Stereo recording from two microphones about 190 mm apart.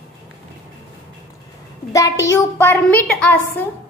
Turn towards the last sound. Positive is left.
turn(degrees=10)  # may be behind; listen again after turning